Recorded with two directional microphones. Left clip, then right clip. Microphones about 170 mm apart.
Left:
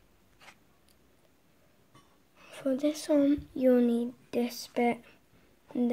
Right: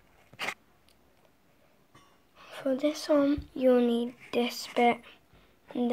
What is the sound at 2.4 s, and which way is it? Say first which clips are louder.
Speech: right 1 dB; 40° left (ahead or behind).